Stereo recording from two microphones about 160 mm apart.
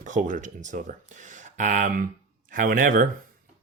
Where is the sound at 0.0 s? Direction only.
50° right (ahead or behind).